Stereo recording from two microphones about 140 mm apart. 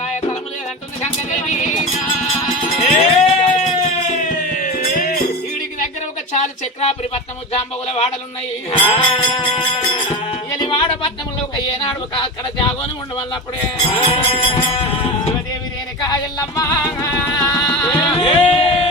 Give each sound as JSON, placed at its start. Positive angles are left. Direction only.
{"t": 2.7, "sound": "a sound", "side_deg": 45}
{"t": 6.3, "sound": "speech", "side_deg": 50}
{"t": 8.8, "sound": "music", "side_deg": 40}
{"t": 13.9, "sound": "music", "side_deg": 40}
{"t": 16.6, "sound": "music", "side_deg": 20}
{"t": 18.0, "sound": "music", "side_deg": 35}